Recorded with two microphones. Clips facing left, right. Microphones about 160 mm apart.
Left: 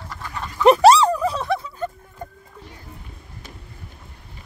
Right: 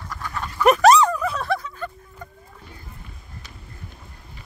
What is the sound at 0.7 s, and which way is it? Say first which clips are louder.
Dog: left 2 dB; 30° left (ahead or behind).